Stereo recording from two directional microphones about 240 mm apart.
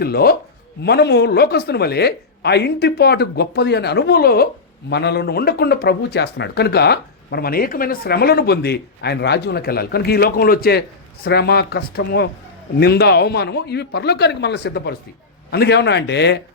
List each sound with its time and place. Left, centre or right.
0.0 s speech: left